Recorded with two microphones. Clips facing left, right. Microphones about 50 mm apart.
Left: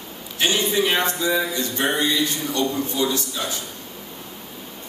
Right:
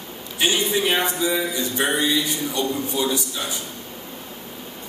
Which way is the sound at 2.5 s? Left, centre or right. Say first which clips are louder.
Left 2 dB; centre.